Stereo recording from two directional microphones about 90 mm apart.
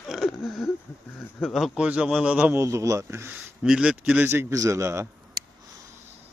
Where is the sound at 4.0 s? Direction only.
20° right (ahead or behind).